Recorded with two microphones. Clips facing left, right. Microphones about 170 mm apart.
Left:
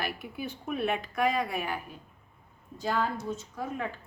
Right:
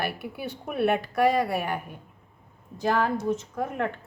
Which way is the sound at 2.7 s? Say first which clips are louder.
Right 5 dB; 80° right.